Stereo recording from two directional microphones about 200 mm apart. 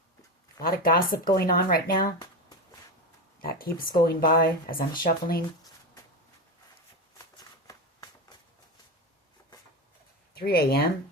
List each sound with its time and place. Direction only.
0.6 s speech: 45° left (ahead or behind)
3.4 s speech: 50° left (ahead or behind)
10.3 s speech: 50° left (ahead or behind)